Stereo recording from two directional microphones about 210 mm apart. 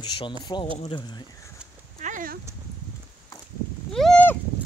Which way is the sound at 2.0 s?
40° right (ahead or behind).